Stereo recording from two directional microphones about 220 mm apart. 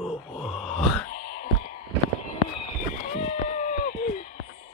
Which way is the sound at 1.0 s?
35° left (ahead or behind).